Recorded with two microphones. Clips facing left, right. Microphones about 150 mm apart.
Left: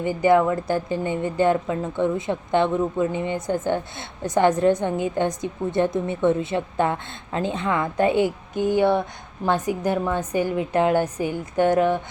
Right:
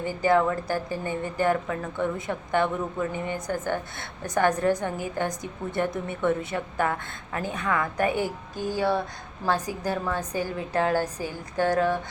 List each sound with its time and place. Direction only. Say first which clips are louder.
0.0 s a woman's voice: left 4 dB; 20° left (ahead or behind)